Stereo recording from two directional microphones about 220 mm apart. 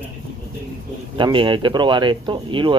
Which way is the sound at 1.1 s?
20° right (ahead or behind).